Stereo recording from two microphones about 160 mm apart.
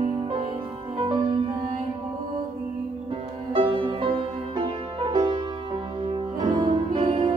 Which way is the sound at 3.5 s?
30° right (ahead or behind).